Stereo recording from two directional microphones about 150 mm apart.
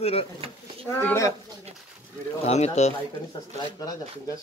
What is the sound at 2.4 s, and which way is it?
Speech, 45° left (ahead or behind).